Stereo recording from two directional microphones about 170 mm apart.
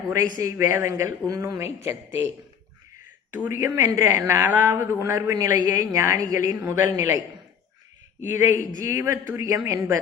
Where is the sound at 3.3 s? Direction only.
10° right (ahead or behind).